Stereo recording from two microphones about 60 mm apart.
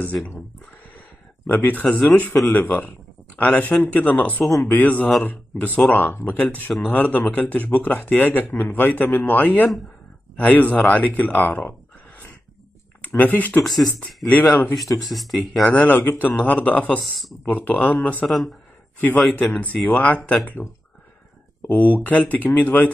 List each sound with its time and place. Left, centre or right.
1.5 s speech: left
13.0 s speech: left
13.7 s speech: centre
14.2 s speech: left
15.0 s speech: centre
15.6 s speech: left
18.2 s speech: centre
18.9 s speech: left
21.6 s speech: left